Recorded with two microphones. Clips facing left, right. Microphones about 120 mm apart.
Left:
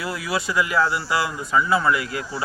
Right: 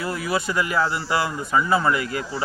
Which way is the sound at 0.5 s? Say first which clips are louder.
Left 4 dB; 35° right (ahead or behind).